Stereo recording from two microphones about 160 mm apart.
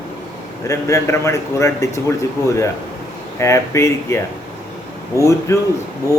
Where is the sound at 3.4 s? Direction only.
20° left (ahead or behind).